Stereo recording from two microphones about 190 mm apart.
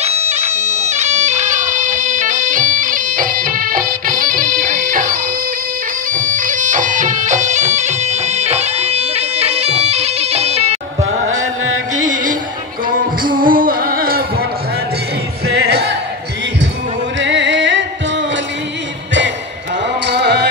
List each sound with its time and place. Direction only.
0.0 s bagpipes: 35° right (ahead or behind)
11.9 s music: 40° right (ahead or behind)
15.4 s music: 60° right (ahead or behind)
17.2 s music: 70° right (ahead or behind)
20.1 s music: 60° right (ahead or behind)